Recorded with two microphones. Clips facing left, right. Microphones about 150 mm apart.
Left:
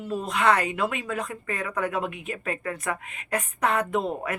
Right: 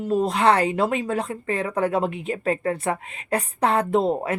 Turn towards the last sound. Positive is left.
turn(degrees=-30)  # may be behind; listen again after turning